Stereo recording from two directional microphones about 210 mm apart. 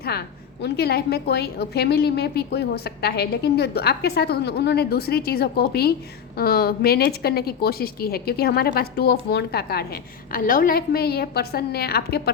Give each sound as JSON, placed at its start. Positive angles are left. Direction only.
{"t": 0.0, "sound": "a woman's voice", "side_deg": 50}